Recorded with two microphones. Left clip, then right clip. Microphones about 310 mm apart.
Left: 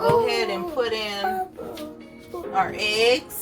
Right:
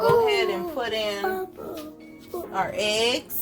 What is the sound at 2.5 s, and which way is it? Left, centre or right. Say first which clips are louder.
Speech: left 2 dB; right.